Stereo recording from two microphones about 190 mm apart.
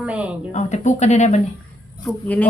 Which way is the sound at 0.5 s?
40° left (ahead or behind).